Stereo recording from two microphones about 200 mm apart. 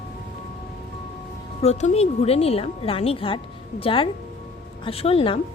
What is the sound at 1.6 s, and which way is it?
A woman's voice, 30° left (ahead or behind).